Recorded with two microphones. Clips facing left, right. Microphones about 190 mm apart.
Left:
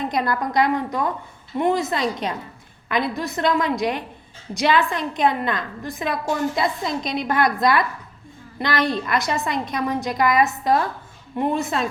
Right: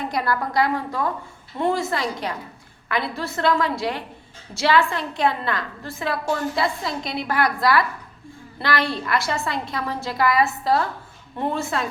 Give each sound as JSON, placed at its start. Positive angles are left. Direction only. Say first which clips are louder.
{"t": 0.0, "sound": "a woman's voice", "louder": "left 1 dB", "side_deg": 20}